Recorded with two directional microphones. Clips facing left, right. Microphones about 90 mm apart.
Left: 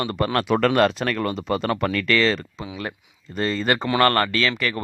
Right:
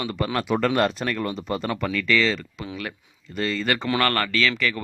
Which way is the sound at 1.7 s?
55° left (ahead or behind).